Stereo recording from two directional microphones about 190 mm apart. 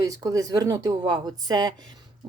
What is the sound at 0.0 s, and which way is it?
Speech, 20° right (ahead or behind).